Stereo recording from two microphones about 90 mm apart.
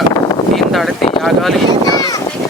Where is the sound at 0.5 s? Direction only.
Centre (ahead or behind).